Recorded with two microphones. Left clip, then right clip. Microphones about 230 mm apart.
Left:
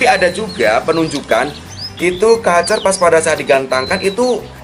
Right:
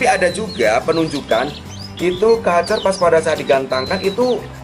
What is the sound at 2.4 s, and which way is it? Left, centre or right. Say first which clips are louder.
A man's voice: left 3 dB; centre.